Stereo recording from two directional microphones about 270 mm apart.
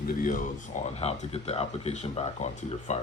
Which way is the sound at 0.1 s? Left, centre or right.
Left.